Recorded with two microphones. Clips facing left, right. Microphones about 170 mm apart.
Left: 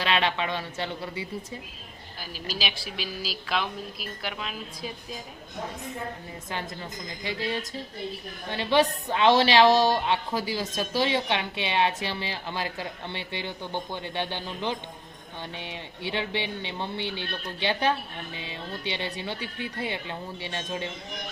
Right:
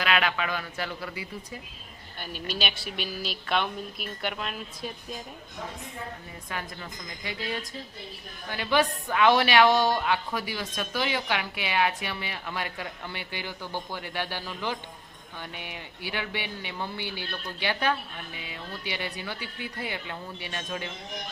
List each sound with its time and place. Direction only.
0.0 s a woman's voice: 30° left (ahead or behind)
2.1 s a woman's voice: 5° left (ahead or behind)
7.2 s a woman's voice: 25° left (ahead or behind)